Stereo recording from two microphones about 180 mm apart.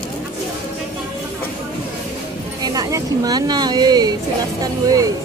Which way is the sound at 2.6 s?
20° right (ahead or behind).